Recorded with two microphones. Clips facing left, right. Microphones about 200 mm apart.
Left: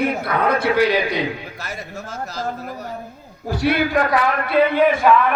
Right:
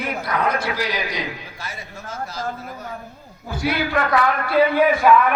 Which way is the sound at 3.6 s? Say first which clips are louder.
Left 4 dB; 55° left (ahead or behind).